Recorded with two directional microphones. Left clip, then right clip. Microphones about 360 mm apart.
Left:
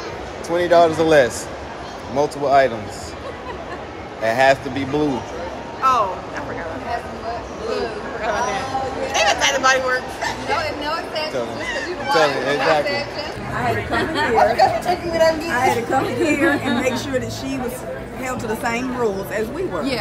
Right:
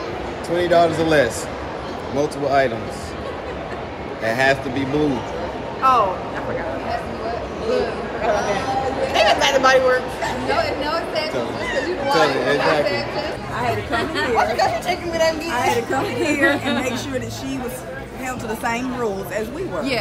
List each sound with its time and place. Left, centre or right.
0.6 s a man's voice: centre
4.2 s a man's voice: centre
5.8 s vehicle: centre
8.2 s speech: centre
11.6 s speech: centre
12.3 s a man's voice: centre
13.9 s speech: centre